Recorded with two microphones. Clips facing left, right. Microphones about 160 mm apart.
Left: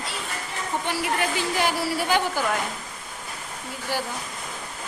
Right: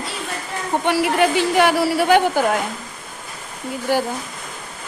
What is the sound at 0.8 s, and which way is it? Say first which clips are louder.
Speech: right 10 dB; 70° right (ahead or behind).